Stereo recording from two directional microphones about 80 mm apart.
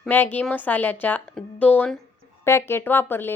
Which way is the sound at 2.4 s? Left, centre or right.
Left.